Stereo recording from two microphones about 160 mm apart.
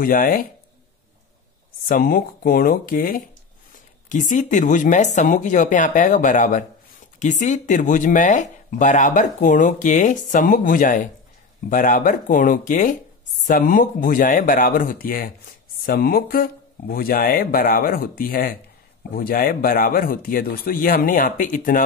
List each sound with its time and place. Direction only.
0.0 s speech: 60° left (ahead or behind)
1.9 s speech: 60° left (ahead or behind)